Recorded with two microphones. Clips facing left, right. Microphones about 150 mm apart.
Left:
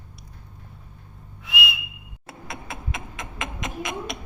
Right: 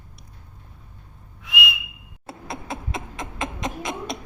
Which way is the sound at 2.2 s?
30° right (ahead or behind).